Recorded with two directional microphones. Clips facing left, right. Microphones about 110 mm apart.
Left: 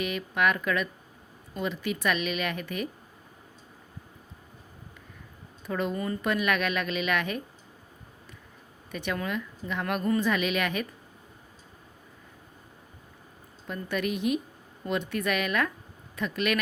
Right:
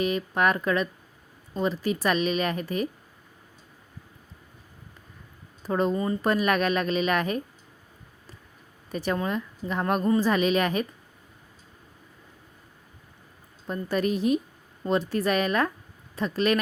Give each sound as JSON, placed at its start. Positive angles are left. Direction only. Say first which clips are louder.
{"t": 0.0, "sound": "a woman's voice", "louder": "right 3 dB", "side_deg": -35}
{"t": 5.6, "sound": "speech", "louder": "right 5 dB", "side_deg": -35}
{"t": 6.2, "sound": "a woman's voice", "louder": "right 3 dB", "side_deg": -35}
{"t": 8.9, "sound": "a woman's voice", "louder": "right 4 dB", "side_deg": -35}
{"t": 13.7, "sound": "a woman's voice", "louder": "right 4 dB", "side_deg": -35}